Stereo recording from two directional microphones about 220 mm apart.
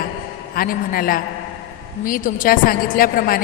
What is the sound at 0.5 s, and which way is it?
A woman's voice, 40° left (ahead or behind).